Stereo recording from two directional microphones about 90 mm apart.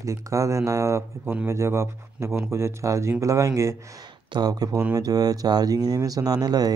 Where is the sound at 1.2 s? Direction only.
20° right (ahead or behind).